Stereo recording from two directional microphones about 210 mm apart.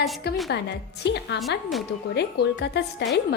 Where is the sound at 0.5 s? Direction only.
55° left (ahead or behind).